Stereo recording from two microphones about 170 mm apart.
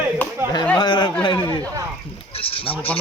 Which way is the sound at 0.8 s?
25° left (ahead or behind).